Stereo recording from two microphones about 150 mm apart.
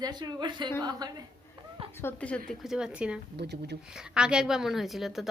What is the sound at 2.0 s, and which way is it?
Speech, 10° left (ahead or behind).